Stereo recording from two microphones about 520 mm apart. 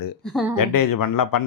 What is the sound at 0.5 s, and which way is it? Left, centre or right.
Speech, left.